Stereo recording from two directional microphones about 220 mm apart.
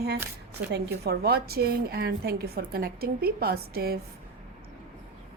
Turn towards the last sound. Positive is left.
turn(degrees=-45)  # may be behind; listen again after turning